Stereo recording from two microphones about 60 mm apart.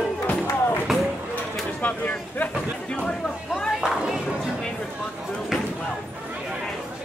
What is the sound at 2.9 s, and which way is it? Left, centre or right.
Speech, centre.